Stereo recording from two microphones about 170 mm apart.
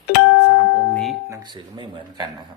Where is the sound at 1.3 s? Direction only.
25° right (ahead or behind).